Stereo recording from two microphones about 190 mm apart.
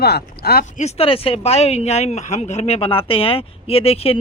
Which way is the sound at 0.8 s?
35° left (ahead or behind).